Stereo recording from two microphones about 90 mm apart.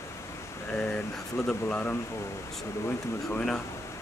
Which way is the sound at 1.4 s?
15° left (ahead or behind).